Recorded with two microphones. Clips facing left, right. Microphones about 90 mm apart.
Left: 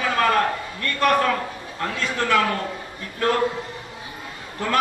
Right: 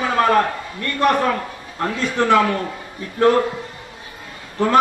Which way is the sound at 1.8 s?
25° right (ahead or behind).